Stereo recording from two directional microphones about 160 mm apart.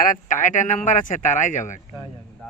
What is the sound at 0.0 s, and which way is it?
Speech, 55° left (ahead or behind).